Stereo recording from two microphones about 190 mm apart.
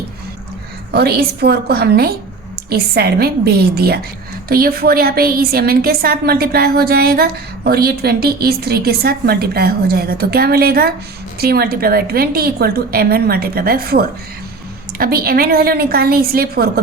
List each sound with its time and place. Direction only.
0.9 s a woman's voice: 55° right (ahead or behind)